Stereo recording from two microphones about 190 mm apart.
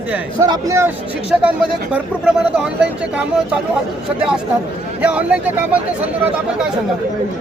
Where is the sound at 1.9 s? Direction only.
5° right (ahead or behind).